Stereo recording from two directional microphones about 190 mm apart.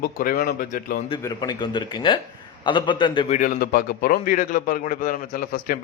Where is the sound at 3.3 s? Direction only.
40° left (ahead or behind).